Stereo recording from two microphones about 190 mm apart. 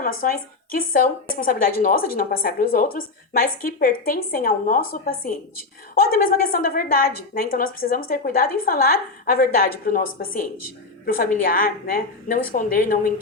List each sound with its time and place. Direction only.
0.0 s a woman's voice: 50° left (ahead or behind)